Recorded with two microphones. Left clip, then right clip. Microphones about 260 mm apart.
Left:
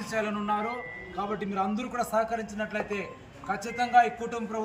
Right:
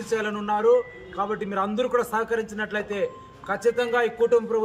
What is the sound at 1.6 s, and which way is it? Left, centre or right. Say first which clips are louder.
Speech: right 8 dB; centre.